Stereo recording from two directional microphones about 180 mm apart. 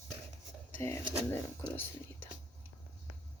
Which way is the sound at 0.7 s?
15° left (ahead or behind).